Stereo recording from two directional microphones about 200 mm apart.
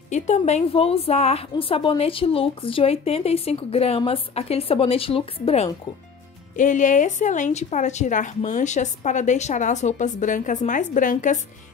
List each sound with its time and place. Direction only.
0.1 s a woman's voice: 35° left (ahead or behind)
6.5 s a woman's voice: 40° left (ahead or behind)